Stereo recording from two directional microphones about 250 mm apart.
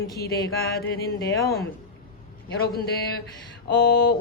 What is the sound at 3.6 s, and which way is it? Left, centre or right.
Speech, left.